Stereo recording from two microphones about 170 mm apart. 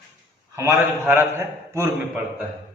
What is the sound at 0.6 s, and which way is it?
A man's voice, 15° right (ahead or behind).